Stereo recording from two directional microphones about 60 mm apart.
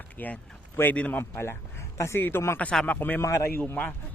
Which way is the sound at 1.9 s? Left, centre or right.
Left.